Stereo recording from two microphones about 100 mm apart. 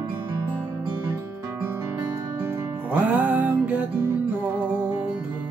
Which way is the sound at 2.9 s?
15° right (ahead or behind).